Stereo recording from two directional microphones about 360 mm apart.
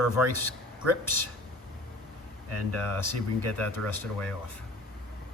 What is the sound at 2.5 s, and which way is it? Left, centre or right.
Speech, right.